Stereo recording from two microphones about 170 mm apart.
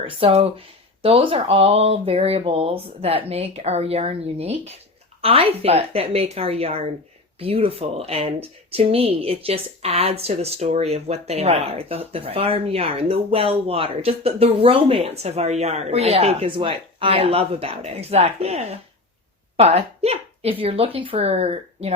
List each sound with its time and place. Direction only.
0.2 s speech: 35° right (ahead or behind)